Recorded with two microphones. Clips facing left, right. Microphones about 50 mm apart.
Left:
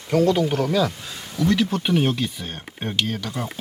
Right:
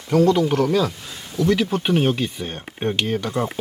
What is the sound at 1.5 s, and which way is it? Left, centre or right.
Speech, centre.